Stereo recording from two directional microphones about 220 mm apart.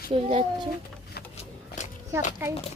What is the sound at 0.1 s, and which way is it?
Speech, 30° right (ahead or behind).